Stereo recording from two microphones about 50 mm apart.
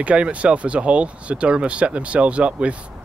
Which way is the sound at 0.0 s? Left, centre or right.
Right.